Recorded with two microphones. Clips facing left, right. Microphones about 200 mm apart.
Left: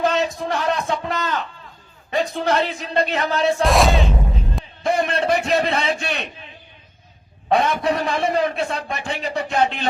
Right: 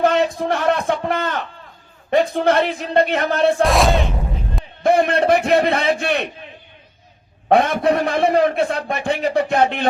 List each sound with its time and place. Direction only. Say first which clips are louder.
0.0 s a sound: right 4 dB; 55° right (ahead or behind)
2.0 s a man's voice: right 5 dB; 55° right (ahead or behind)
3.6 s music: right 1 dB; centre (ahead or behind)
4.8 s a man's voice: right 5 dB; 55° right (ahead or behind)
7.4 s a man's voice: right 4 dB; 55° right (ahead or behind)